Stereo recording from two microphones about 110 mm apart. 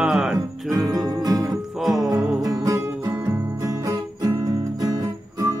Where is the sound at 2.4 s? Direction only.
30° right (ahead or behind).